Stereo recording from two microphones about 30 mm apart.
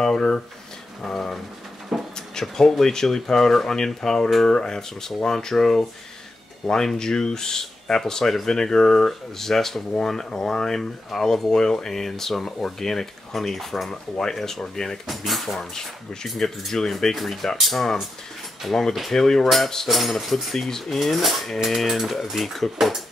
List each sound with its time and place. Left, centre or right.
1.0 s speech: centre
1.9 s a sound: centre
2.4 s speech: centre
12.4 s speech: centre
12.6 s speech: centre
13.8 s speech: left
15.0 s speech: centre
15.7 s speech: centre
16.3 s speech: centre
19.1 s speech: centre
19.9 s speech: centre
20.5 s speech: centre